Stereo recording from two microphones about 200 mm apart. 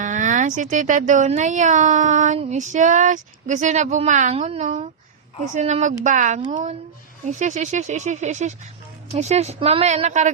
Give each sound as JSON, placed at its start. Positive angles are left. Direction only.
{"t": 0.0, "sound": "speech", "side_deg": -40}